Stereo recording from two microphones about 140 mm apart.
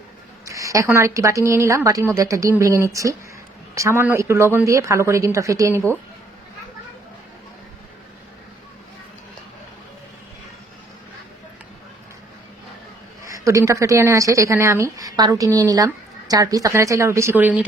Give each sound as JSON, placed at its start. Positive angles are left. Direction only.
{"t": 0.4, "sound": "speech", "side_deg": -25}
{"t": 13.2, "sound": "speech", "side_deg": -25}